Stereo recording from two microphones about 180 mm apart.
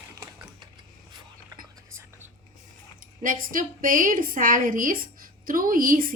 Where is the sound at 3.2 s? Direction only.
50° right (ahead or behind).